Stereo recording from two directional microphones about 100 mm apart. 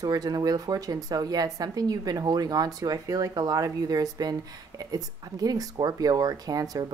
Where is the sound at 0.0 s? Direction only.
40° right (ahead or behind).